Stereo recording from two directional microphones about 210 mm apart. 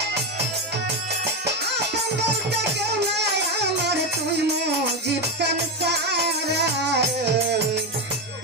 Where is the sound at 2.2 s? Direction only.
55° right (ahead or behind).